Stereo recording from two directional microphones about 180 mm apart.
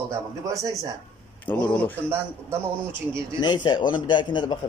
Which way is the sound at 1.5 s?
10° left (ahead or behind).